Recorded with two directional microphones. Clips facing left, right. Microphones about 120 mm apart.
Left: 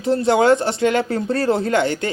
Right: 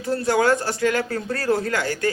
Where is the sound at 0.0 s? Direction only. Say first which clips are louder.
Left 4 dB; 20° left (ahead or behind).